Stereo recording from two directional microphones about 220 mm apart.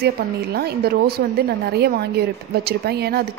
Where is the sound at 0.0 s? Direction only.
45° right (ahead or behind).